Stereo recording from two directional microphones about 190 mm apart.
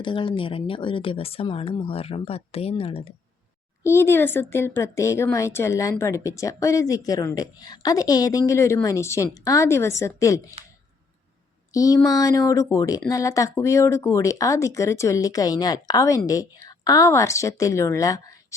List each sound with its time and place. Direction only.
0.0 s speech: 25° left (ahead or behind)
3.8 s speech: 15° left (ahead or behind)
11.7 s speech: 20° left (ahead or behind)